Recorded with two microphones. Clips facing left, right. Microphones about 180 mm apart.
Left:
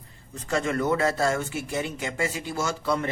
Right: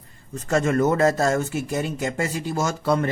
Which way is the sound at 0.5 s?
45° right (ahead or behind).